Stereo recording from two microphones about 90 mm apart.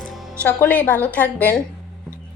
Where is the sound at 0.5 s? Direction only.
20° left (ahead or behind).